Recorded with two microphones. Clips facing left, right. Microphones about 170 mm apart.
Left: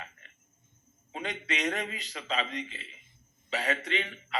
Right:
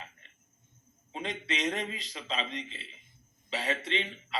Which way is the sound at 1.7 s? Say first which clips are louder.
Even; 30° right (ahead or behind).